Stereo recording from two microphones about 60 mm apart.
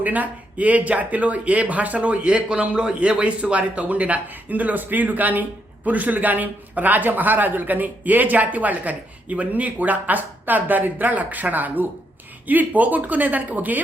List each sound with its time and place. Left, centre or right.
0.0 s speech: right